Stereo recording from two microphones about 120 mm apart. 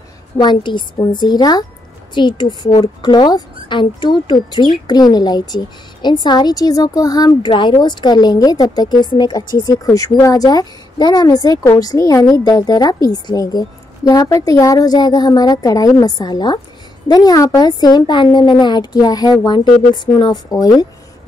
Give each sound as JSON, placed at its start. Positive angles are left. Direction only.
{"t": 0.4, "sound": "a woman's voice", "side_deg": 40}